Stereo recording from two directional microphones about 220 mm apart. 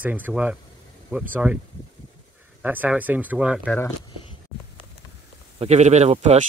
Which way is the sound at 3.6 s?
5° left (ahead or behind).